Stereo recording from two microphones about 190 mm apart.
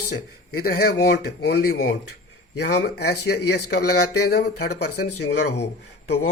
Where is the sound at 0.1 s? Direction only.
55° left (ahead or behind).